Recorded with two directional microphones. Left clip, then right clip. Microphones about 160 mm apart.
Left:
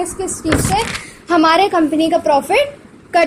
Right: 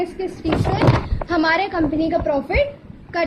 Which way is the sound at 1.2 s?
15° left (ahead or behind).